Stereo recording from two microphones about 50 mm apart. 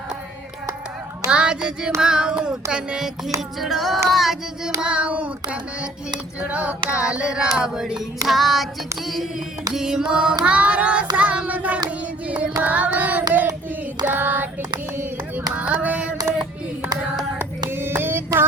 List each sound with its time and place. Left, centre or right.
1.3 s child singing: right
2.0 s hands: centre
3.6 s child singing: centre
4.8 s child singing: right
6.5 s hands: right; by 8.6 s centre
9.7 s child singing: centre; by 14.5 s right
15.5 s female singing: right
17.3 s hands: right